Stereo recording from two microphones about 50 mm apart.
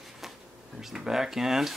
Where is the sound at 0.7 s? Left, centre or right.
Centre.